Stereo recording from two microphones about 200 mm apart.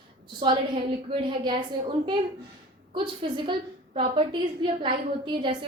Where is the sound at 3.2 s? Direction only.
25° right (ahead or behind).